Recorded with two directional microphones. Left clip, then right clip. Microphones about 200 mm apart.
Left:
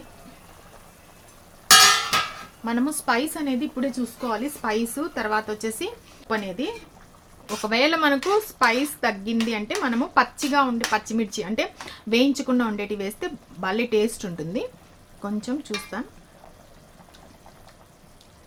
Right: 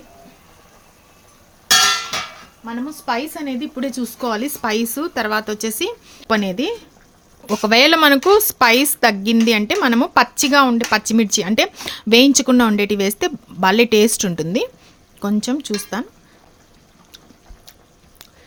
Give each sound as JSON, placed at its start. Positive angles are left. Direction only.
{"t": 3.1, "sound": "a woman's voice", "side_deg": -15}
{"t": 3.8, "sound": "speech", "side_deg": -45}